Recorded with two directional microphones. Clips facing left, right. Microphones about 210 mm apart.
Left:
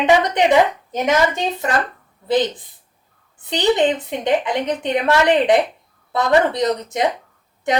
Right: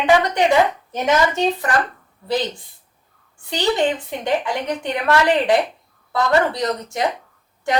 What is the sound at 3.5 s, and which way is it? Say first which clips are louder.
Speech: left 3 dB; 20° left (ahead or behind).